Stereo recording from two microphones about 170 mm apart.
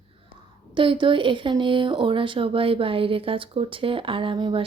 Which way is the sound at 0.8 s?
30° right (ahead or behind).